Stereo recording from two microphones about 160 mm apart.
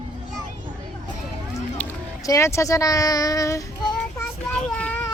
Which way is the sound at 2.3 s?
20° left (ahead or behind).